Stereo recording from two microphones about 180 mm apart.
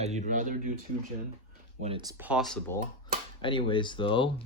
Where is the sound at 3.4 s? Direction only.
30° left (ahead or behind).